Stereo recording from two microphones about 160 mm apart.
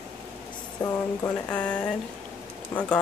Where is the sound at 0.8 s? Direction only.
20° left (ahead or behind).